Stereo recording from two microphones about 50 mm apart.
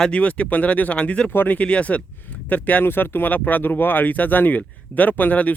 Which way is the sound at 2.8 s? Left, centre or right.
Left.